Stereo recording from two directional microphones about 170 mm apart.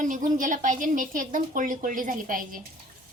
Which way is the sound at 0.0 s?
50° right (ahead or behind).